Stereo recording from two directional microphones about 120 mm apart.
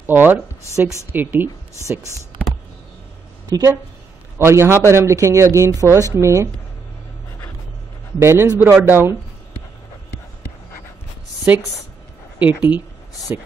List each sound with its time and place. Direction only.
0.0 s a woman's voice: 15° right (ahead or behind)
3.4 s speech: 35° right (ahead or behind)
4.4 s a woman's voice: 20° right (ahead or behind)
8.2 s a woman's voice: 25° right (ahead or behind)
11.5 s a woman's voice: 10° right (ahead or behind)